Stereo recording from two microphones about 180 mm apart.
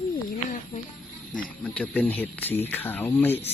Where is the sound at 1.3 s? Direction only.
5° left (ahead or behind).